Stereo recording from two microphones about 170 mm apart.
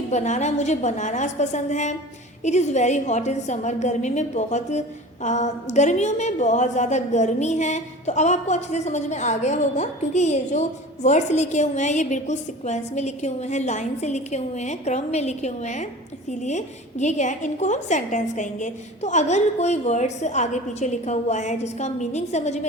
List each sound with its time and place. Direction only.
0.1 s a woman's voice: 45° left (ahead or behind)